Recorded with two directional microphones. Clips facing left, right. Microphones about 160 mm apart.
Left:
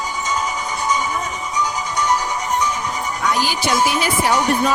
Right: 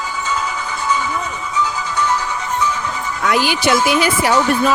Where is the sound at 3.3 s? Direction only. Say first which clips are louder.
Right 5 dB; 75° right (ahead or behind).